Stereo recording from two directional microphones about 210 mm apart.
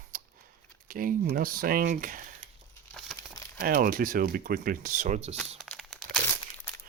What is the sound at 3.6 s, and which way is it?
Speech, 45° right (ahead or behind).